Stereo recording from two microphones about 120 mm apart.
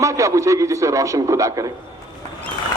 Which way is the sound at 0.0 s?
25° right (ahead or behind).